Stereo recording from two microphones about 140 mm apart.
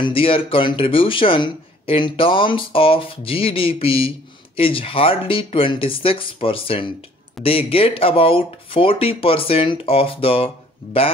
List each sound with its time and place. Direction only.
0.0 s speech: 40° left (ahead or behind)